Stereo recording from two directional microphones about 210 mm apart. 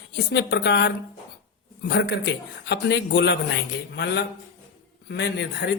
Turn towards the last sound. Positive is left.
turn(degrees=55)  # may be behind; listen again after turning